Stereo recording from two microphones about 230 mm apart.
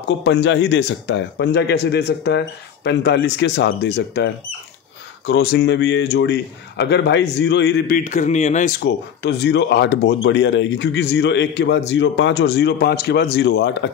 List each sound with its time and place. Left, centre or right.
0.2 s speech: left
8.8 s speech: left